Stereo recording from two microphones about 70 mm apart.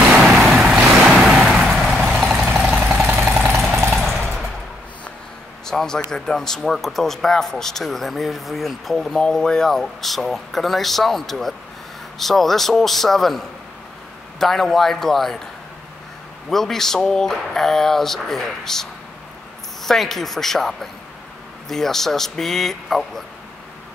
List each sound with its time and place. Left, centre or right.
0.2 s vehicle: centre
3.1 s jackhammer: right
3.5 s a sound: centre
5.7 s a sound: centre
6.1 s speech: centre
16.4 s speech: centre